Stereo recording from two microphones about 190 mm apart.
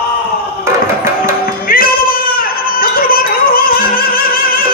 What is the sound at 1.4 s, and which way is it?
Music, 50° left (ahead or behind).